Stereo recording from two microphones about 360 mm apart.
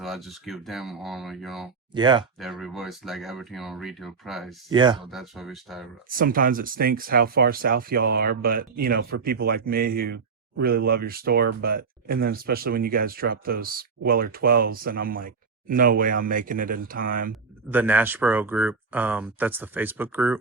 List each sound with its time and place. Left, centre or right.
0.0 s speech: centre
1.9 s speech: centre
2.4 s speech: centre
4.7 s speech: centre
5.1 s speech: centre
6.1 s speech: right
17.7 s speech: centre